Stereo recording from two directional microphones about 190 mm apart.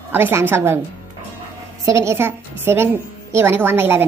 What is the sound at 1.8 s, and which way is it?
A woman's voice, 15° right (ahead or behind).